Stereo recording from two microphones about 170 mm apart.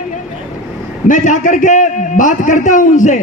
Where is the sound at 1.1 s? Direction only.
50° left (ahead or behind).